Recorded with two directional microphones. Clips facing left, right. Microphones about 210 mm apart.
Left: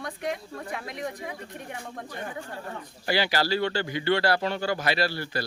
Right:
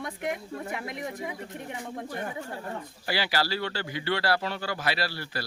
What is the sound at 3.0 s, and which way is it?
A man's voice, 5° right (ahead or behind).